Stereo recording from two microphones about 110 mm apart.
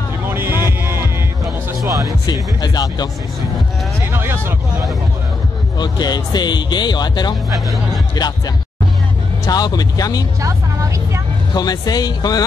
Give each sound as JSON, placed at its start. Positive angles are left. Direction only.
{"t": 0.3, "sound": "vehicle", "side_deg": -20}
{"t": 1.9, "sound": "music", "side_deg": -30}
{"t": 2.6, "sound": "speech", "side_deg": 40}
{"t": 4.0, "sound": "speech", "side_deg": -20}
{"t": 5.8, "sound": "speech", "side_deg": 40}
{"t": 9.5, "sound": "speech", "side_deg": 35}
{"t": 11.5, "sound": "speech", "side_deg": 35}